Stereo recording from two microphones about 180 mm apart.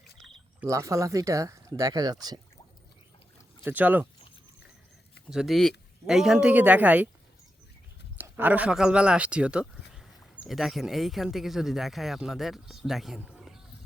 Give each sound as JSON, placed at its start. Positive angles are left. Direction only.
{"t": 0.6, "sound": "speech", "side_deg": -15}
{"t": 3.6, "sound": "speech", "side_deg": -10}
{"t": 5.3, "sound": "speech", "side_deg": 0}
{"t": 8.2, "sound": "speech", "side_deg": -10}